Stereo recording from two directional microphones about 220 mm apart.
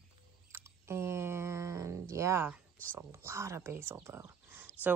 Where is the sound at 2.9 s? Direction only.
10° right (ahead or behind).